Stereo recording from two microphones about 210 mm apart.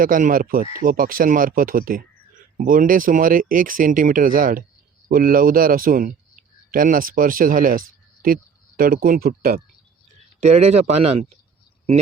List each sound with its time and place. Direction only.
0.0 s speech: 40° right (ahead or behind)
10.4 s speech: 30° right (ahead or behind)